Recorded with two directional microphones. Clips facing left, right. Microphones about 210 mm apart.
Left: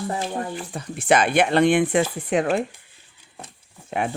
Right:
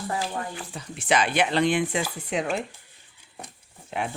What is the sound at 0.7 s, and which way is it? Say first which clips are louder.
Speech: left 5 dB; 55° left (ahead or behind).